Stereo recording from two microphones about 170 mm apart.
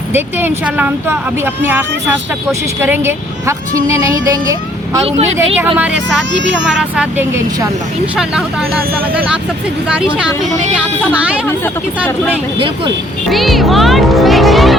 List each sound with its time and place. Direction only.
0.1 s speech: 10° right (ahead or behind)
2.5 s speech: 15° right (ahead or behind)
5.0 s speech: 35° right (ahead or behind)
5.7 s speech: 5° right (ahead or behind)
6.3 s speech: 90° right
6.7 s speech: 5° right (ahead or behind)
10.8 s speech: 5° right (ahead or behind)
12.5 s speech: 30° right (ahead or behind)
13.3 s music: centre (ahead or behind)